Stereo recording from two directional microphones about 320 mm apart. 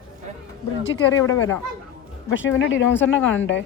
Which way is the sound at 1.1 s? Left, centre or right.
Centre.